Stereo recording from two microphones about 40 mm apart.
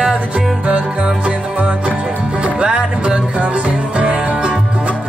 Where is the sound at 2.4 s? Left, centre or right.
Right.